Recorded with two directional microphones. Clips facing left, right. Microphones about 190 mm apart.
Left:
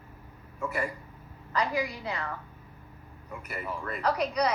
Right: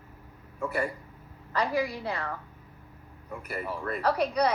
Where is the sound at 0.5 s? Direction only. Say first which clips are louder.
Right 2 dB; 35° right (ahead or behind).